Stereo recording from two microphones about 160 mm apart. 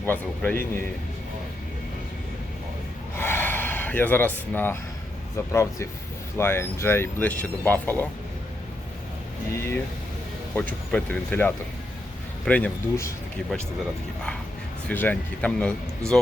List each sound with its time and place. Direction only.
0.0 s speech: 10° left (ahead or behind)
3.2 s gasp: 15° left (ahead or behind)
5.5 s speech: 15° left (ahead or behind)
10.5 s speech: 10° left (ahead or behind)
14.8 s speech: 10° left (ahead or behind)